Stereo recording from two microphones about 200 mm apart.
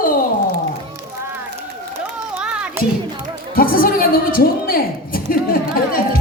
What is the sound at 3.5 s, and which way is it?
A man's voice, 45° left (ahead or behind).